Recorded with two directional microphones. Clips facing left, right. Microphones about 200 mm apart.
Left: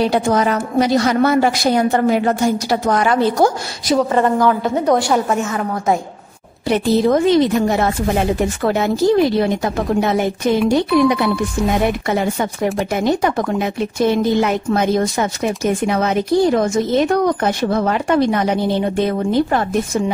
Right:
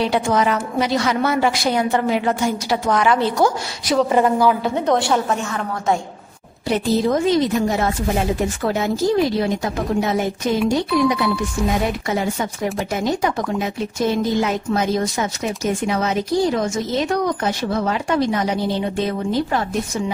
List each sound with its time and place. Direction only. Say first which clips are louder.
0.0 s a woman's voice: left 3 dB; 40° left (ahead or behind)
4.1 s a woman's voice: left 1 dB; 5° right (ahead or behind)
4.7 s a woman's voice: left 3 dB; 5° left (ahead or behind)
6.7 s speech: left 4 dB; 60° left (ahead or behind)